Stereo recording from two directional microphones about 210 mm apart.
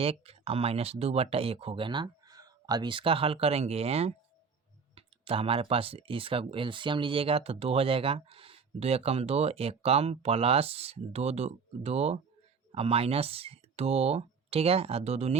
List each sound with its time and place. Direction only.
0.0 s speech: 30° right (ahead or behind)